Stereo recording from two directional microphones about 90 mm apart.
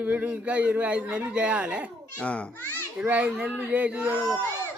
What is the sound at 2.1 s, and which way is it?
Speech, 15° left (ahead or behind).